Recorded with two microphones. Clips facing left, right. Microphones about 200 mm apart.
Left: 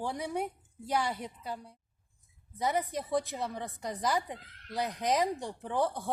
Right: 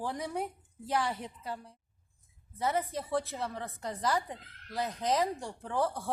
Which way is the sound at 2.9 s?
15° left (ahead or behind).